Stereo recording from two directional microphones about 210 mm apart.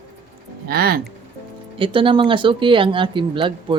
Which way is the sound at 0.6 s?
45° right (ahead or behind).